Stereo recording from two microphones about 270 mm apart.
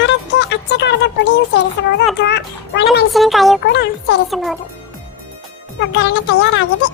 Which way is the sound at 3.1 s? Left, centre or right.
Centre.